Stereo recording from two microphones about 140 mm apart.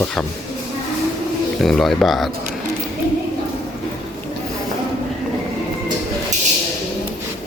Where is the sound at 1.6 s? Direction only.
Centre (ahead or behind).